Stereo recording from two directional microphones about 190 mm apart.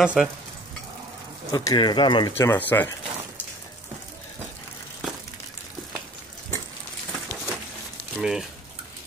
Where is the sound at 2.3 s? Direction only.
10° left (ahead or behind).